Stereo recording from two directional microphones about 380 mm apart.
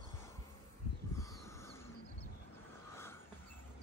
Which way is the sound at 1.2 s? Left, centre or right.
Centre.